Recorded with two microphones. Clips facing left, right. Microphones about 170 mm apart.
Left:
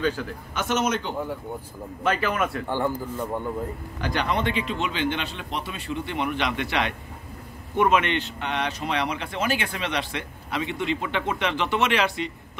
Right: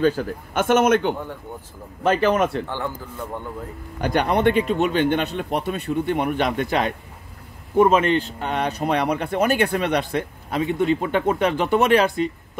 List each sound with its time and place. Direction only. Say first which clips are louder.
0.0 s a man's voice: right 6 dB; 45° right (ahead or behind)
2.0 s a man's voice: right 6 dB; 30° right (ahead or behind)
2.6 s speech: left 3 dB; 10° left (ahead or behind)
4.0 s speech: right 7 dB; 55° right (ahead or behind)